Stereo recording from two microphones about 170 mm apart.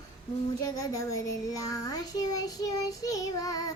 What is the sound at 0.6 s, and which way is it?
A child's voice, 20° left (ahead or behind).